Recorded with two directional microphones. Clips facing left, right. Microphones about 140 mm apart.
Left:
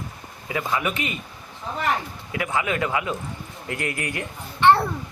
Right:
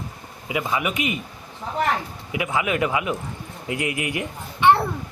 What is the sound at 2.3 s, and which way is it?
A child's voice, 15° right (ahead or behind).